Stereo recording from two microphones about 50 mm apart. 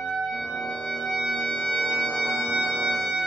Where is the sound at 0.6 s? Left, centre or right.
Centre.